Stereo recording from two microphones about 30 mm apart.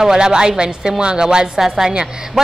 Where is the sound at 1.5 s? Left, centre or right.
Centre.